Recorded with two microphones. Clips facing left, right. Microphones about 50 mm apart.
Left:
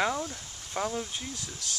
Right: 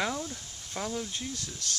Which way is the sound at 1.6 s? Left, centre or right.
Centre.